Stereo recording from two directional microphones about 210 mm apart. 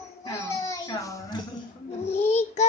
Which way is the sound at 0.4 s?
15° left (ahead or behind).